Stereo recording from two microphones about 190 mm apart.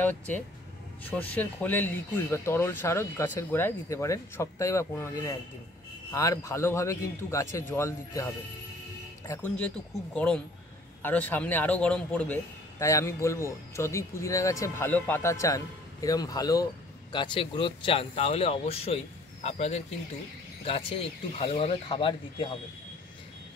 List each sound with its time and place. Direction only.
0.0 s a man's voice: 10° left (ahead or behind)
9.3 s a man's voice: 5° left (ahead or behind); by 22.5 s 25° left (ahead or behind)